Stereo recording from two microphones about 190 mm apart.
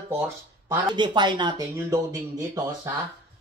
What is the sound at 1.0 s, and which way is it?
Speech, 25° right (ahead or behind).